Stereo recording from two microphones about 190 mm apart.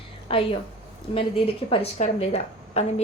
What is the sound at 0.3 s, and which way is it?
Speech, 30° left (ahead or behind).